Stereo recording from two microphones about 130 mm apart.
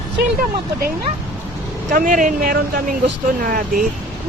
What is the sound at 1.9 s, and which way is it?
Speech, 90° right.